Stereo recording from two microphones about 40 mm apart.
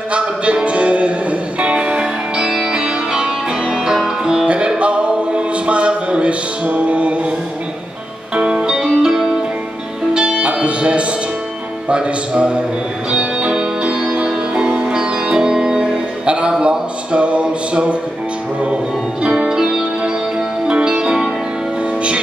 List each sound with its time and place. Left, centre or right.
0.1 s music: right; by 4.1 s centre
4.7 s music: right
8.4 s music: right
10.2 s music: right
11.9 s speech: right
13.1 s music: right
16.3 s music: right
16.6 s a sound: right
19.2 s music: right
19.5 s music: centre
20.0 s music: right